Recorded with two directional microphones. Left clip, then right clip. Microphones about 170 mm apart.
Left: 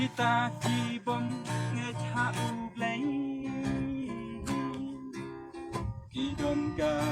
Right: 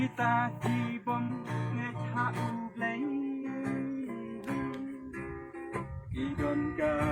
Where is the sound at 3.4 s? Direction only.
40° left (ahead or behind).